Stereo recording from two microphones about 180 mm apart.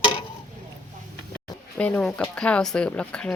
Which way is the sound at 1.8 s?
5° left (ahead or behind).